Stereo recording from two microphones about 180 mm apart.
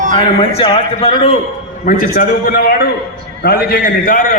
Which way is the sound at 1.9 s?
55° left (ahead or behind).